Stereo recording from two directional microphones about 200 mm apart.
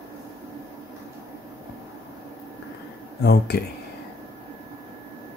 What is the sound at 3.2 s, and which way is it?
Speech, 55° left (ahead or behind).